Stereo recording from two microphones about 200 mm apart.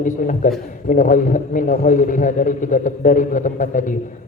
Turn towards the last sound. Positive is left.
turn(degrees=40)  # may be behind; listen again after turning